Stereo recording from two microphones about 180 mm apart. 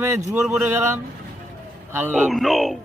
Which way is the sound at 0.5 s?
15° right (ahead or behind).